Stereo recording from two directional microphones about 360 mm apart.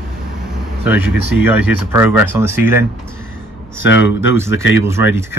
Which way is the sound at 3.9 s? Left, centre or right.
Left.